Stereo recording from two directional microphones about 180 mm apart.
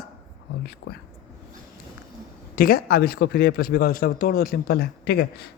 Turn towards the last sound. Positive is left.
turn(degrees=65)  # may be behind; listen again after turning